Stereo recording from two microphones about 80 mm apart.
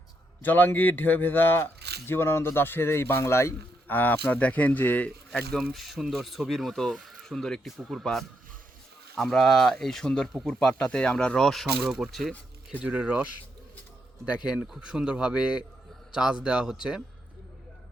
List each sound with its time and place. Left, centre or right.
0.4 s a man's voice: left
5.7 s speech: centre
12.8 s speech: centre
14.3 s speech: centre